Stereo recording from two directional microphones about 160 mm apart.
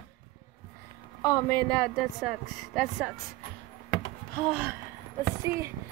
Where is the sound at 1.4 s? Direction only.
10° left (ahead or behind).